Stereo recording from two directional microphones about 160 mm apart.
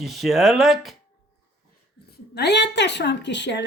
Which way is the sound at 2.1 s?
85° left.